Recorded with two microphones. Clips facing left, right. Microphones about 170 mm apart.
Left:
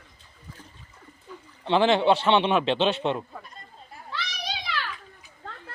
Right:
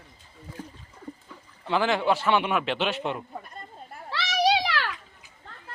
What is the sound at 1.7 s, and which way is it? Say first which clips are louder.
A man's voice: left 4 dB; 25° left (ahead or behind).